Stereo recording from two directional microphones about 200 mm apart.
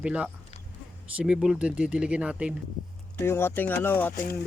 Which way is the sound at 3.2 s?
10° left (ahead or behind).